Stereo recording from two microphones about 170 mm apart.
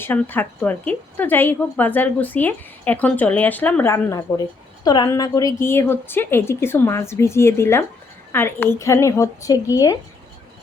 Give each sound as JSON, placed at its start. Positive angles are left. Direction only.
{"t": 0.0, "sound": "a woman's voice", "side_deg": 10}